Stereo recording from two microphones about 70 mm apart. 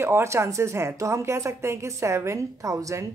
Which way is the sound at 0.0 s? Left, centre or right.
Right.